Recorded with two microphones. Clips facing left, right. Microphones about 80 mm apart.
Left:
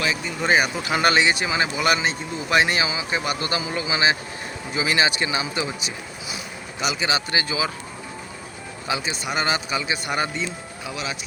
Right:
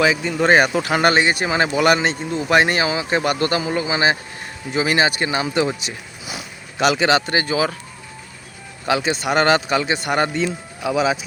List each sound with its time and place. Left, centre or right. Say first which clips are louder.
0.1 s speech: right 6 dB; right
0.9 s speech: right 3 dB; right
2.5 s a man's voice: right 4 dB; right
3.5 s speech: right 5 dB; right
7.3 s speech: right 5 dB; right
8.9 s speech: right 8 dB; right
10.3 s speech: right 7 dB; right